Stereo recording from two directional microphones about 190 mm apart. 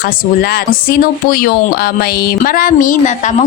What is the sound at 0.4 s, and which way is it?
A woman's voice, 50° left (ahead or behind).